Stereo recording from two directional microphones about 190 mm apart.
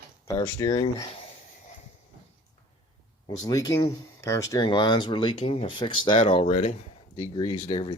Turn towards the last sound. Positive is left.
turn(degrees=30)  # may be behind; listen again after turning